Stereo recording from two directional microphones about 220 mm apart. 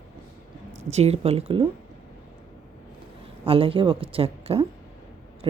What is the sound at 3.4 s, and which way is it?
Speech, 25° right (ahead or behind).